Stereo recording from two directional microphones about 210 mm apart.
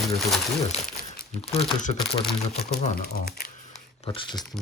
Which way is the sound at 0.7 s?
30° left (ahead or behind).